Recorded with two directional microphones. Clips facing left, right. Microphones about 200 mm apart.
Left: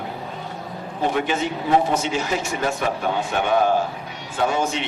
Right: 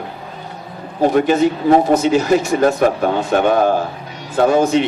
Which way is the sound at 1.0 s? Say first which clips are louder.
Right 9 dB; 40° right (ahead or behind).